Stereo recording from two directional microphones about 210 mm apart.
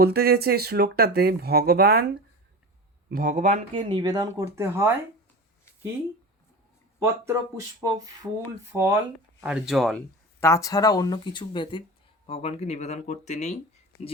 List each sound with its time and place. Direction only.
0.0 s speech: 45° right (ahead or behind); by 4.9 s 10° right (ahead or behind)
7.0 s speech: 15° right (ahead or behind)
10.4 s speech: 15° left (ahead or behind); by 13.6 s 35° left (ahead or behind)